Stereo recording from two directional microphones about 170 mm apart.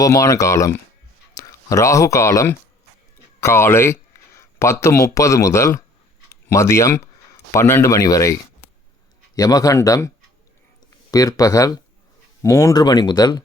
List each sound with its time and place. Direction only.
0.0 s speech: 20° left (ahead or behind)
11.1 s speech: 20° left (ahead or behind)